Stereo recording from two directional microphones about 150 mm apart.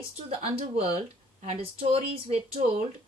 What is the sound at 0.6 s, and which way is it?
A woman's voice, 40° right (ahead or behind).